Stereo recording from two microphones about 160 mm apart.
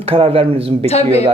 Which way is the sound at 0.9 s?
40° left (ahead or behind).